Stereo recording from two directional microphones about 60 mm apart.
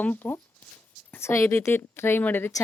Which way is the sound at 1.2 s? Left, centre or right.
Left.